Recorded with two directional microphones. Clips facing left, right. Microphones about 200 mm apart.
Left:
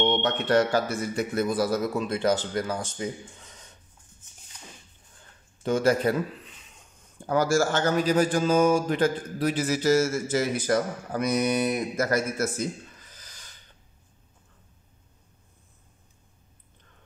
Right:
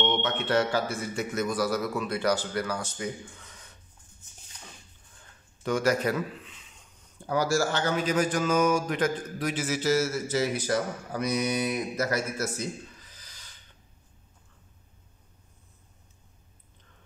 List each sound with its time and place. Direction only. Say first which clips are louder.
0.0 s a man's voice: left 3 dB; 35° left (ahead or behind)
5.6 s a man's voice: left 3 dB; 25° left (ahead or behind)
7.2 s a man's voice: left 3 dB; 50° left (ahead or behind)
13.2 s a sound: left 2 dB; 50° left (ahead or behind)